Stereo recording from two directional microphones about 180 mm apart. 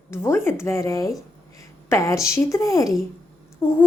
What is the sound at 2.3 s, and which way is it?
A woman's voice, 15° left (ahead or behind).